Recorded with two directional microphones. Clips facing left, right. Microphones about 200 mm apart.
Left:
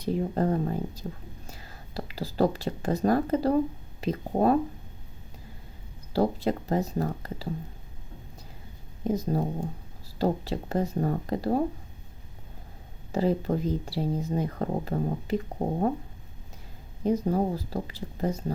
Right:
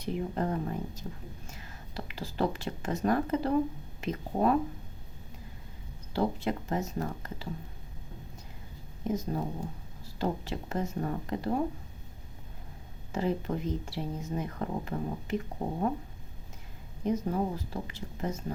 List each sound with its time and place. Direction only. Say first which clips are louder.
0.0 s speech: left 5 dB; 35° left (ahead or behind)
6.1 s speech: left 5 dB; 35° left (ahead or behind)
9.0 s speech: left 5 dB; 35° left (ahead or behind)
13.1 s speech: left 5 dB; 35° left (ahead or behind)
17.0 s speech: left 4 dB; 35° left (ahead or behind)